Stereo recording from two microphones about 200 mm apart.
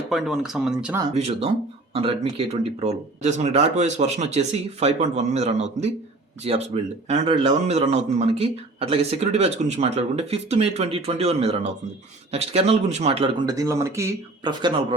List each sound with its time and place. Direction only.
0.1 s speech: centre (ahead or behind)
1.1 s speech: 30° right (ahead or behind)